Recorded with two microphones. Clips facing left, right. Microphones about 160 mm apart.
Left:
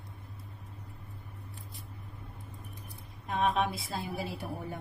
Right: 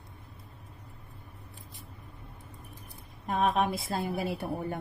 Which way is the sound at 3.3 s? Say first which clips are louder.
Right 2 dB; 50° right (ahead or behind).